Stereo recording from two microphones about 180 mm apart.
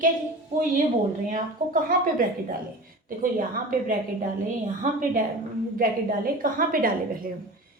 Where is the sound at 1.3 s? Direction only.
50° right (ahead or behind).